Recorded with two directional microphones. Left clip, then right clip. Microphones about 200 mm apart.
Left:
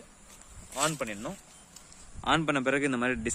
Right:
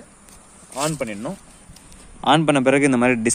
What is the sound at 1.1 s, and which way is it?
Speech, 15° right (ahead or behind).